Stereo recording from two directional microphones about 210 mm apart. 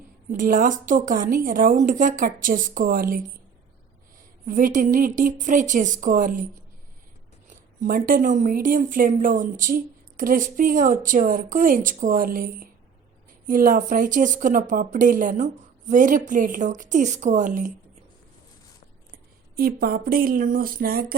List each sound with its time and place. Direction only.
0.3 s speech: 40° right (ahead or behind)
4.4 s speech: 40° right (ahead or behind)
7.8 s speech: 40° right (ahead or behind)
19.5 s a sound: 45° right (ahead or behind)